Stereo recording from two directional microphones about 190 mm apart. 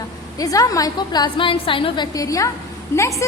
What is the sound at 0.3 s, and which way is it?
A woman's voice, 20° left (ahead or behind).